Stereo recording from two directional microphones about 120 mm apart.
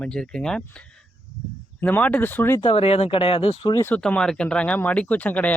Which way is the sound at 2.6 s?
55° left (ahead or behind).